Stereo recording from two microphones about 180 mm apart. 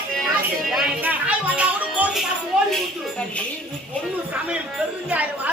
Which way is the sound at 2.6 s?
5° left (ahead or behind).